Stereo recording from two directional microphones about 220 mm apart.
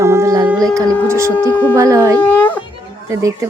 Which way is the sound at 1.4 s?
10° left (ahead or behind).